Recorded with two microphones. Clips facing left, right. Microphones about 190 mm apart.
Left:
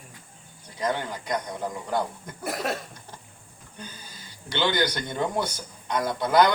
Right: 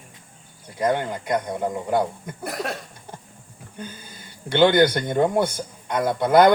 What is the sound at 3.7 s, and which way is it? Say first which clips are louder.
Speech: right 6 dB; 55° right (ahead or behind).